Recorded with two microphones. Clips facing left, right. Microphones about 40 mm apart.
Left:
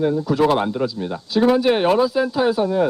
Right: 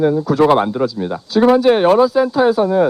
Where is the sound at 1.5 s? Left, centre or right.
Centre.